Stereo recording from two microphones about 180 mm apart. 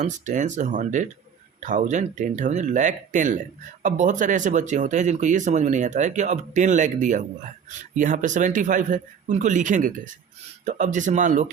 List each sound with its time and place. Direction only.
0.0 s speech: 45° right (ahead or behind)